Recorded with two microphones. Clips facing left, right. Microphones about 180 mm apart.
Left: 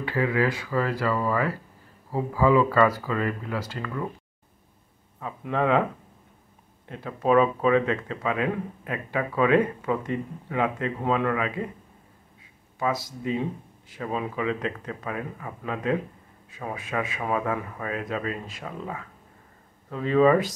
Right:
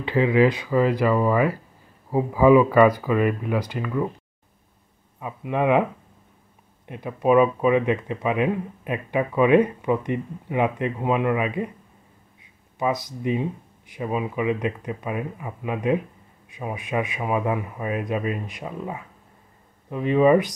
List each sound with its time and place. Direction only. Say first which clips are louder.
0.0 s speech: right 6 dB; 20° right (ahead or behind)
5.2 s speech: right 2 dB; 15° right (ahead or behind)
6.9 s speech: right 3 dB; 15° right (ahead or behind)
12.7 s speech: right 3 dB; 20° right (ahead or behind)